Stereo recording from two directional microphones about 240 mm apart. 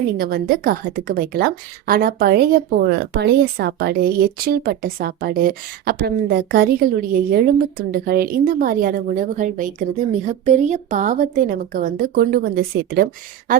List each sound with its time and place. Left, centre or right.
0.2 s a woman's voice: right